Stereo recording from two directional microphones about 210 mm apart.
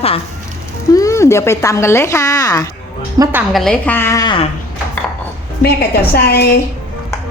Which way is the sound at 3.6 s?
5° left (ahead or behind).